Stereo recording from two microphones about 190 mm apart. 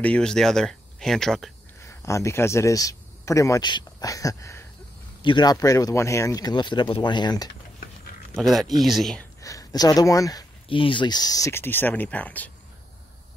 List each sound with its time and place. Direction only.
0.0 s speech: 5° left (ahead or behind)
1.9 s speech: 15° left (ahead or behind)
8.4 s speech: centre (ahead or behind)
9.4 s speech: 15° left (ahead or behind)